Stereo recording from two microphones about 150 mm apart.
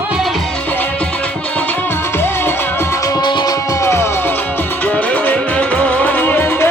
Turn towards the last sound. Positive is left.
turn(degrees=15)  # may be behind; listen again after turning